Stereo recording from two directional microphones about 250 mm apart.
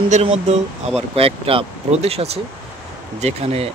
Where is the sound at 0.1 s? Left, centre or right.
Right.